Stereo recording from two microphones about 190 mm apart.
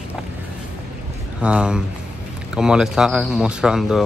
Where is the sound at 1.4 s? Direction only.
5° right (ahead or behind).